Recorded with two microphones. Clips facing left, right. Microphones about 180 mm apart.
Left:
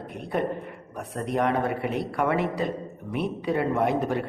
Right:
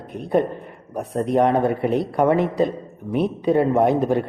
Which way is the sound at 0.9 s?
30° right (ahead or behind).